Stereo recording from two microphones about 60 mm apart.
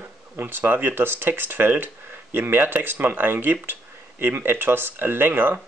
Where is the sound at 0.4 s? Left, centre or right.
Right.